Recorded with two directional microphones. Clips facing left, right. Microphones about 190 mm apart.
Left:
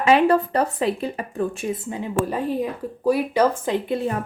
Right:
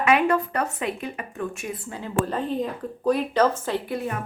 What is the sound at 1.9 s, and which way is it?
Speech, 15° left (ahead or behind).